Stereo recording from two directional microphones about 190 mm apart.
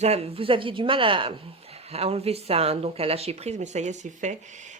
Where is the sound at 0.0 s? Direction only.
35° right (ahead or behind).